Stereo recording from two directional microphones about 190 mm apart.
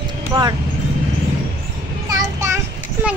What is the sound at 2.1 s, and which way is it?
Child singing, 15° right (ahead or behind).